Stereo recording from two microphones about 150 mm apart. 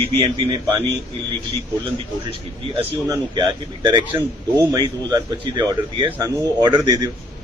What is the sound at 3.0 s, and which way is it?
A man's voice, 25° right (ahead or behind).